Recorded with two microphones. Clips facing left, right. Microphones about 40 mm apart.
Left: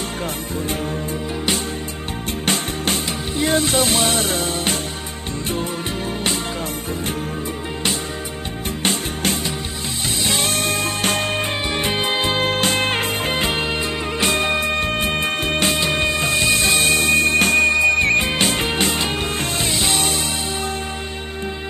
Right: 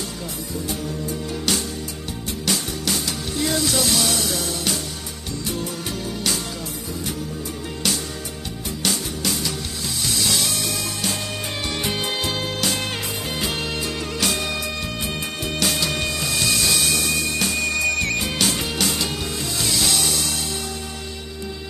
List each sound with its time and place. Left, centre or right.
2.4 s music: left
8.8 s music: left
11.7 s music: left
17.7 s music: left